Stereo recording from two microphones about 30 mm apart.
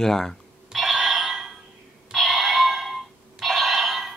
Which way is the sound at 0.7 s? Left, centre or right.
Centre.